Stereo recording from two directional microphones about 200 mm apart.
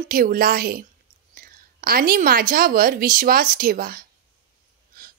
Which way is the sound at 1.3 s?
50° right (ahead or behind).